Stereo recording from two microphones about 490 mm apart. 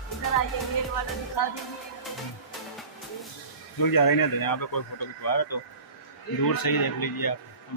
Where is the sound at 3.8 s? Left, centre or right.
Left.